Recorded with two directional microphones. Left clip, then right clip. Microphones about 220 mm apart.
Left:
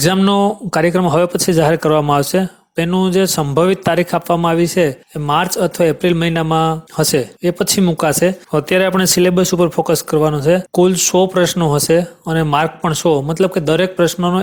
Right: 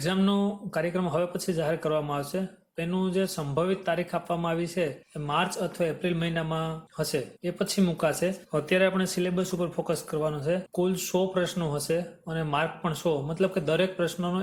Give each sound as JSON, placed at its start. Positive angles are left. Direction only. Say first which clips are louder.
{"t": 0.0, "sound": "speech", "louder": "left 14 dB", "side_deg": 45}